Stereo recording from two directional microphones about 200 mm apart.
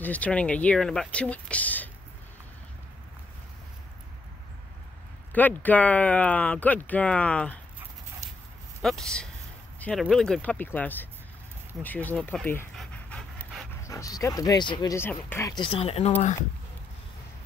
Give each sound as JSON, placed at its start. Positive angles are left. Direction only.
{"t": 0.0, "sound": "speech", "side_deg": 5}
{"t": 5.3, "sound": "speech", "side_deg": 10}
{"t": 8.8, "sound": "a man's voice", "side_deg": 5}
{"t": 11.8, "sound": "pant", "side_deg": 10}
{"t": 13.8, "sound": "speech", "side_deg": 15}